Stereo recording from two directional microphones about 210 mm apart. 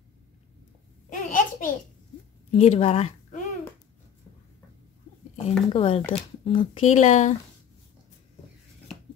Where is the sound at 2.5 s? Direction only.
30° left (ahead or behind).